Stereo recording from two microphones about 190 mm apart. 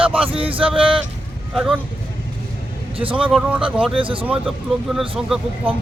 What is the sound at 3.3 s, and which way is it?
Speech, 5° right (ahead or behind).